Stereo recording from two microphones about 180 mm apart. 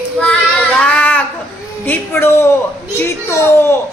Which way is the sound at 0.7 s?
10° left (ahead or behind).